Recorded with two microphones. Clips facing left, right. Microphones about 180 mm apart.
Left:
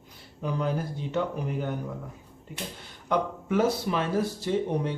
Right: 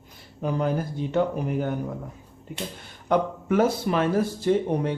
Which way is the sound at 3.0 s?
50° right (ahead or behind).